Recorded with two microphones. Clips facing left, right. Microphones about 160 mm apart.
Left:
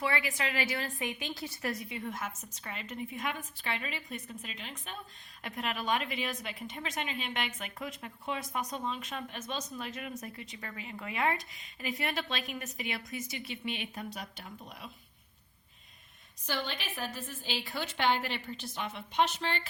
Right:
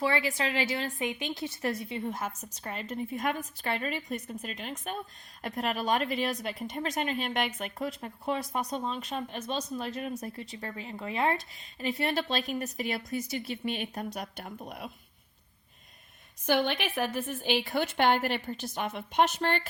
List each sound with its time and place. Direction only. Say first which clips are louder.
0.0 s a woman's voice: right 4 dB; 30° right (ahead or behind); by 14.8 s 55° right (ahead or behind)
16.5 s a woman's voice: right 9 dB; 60° right (ahead or behind)